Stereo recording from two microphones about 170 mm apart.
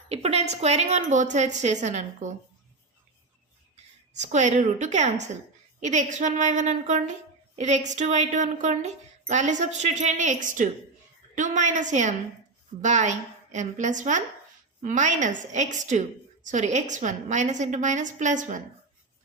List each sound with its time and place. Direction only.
0.1 s a sound: 40° right (ahead or behind)
0.5 s a woman's voice: 40° right (ahead or behind)
4.1 s a woman's voice: 45° right (ahead or behind)